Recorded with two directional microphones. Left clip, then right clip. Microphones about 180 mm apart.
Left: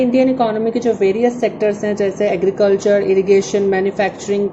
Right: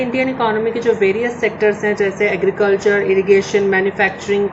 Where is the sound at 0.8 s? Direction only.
60° left (ahead or behind).